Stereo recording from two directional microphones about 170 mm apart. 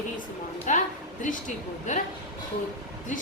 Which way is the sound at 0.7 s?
45° left (ahead or behind).